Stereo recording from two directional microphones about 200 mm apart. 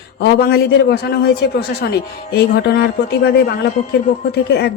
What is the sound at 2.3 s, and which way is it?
Speech, 50° left (ahead or behind).